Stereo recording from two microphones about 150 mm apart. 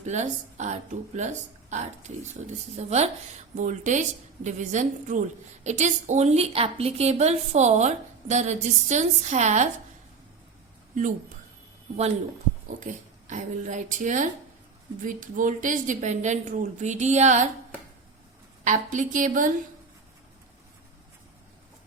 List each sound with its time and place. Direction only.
0.0 s a woman's voice: 50° right (ahead or behind)
12.6 s a woman's voice: 55° right (ahead or behind)
18.6 s a woman's voice: 55° right (ahead or behind)